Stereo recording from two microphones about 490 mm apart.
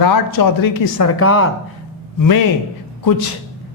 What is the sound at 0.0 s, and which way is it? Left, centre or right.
A man's voice, left.